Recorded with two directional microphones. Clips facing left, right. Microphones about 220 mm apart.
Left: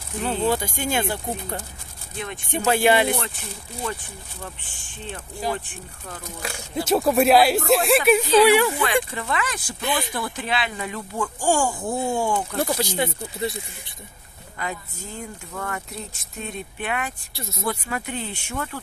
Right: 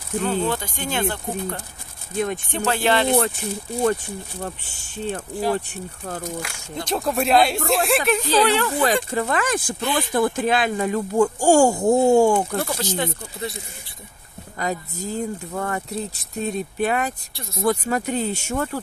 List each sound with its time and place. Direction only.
0.2 s speech: 10° left (ahead or behind)
2.1 s speech: 45° right (ahead or behind)
2.5 s speech: 10° left (ahead or behind)
5.7 s speech: 45° right (ahead or behind)
6.8 s speech: 5° left (ahead or behind)
8.7 s speech: 40° right (ahead or behind)
12.6 s speech: 10° left (ahead or behind)
14.6 s speech: 40° right (ahead or behind)